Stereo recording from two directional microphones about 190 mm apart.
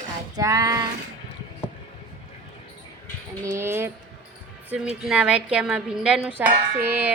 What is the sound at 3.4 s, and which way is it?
A woman's voice, 15° right (ahead or behind).